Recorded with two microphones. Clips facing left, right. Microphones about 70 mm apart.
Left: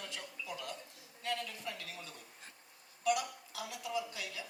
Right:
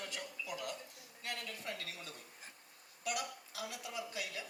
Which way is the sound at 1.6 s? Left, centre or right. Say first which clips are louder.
Even; right.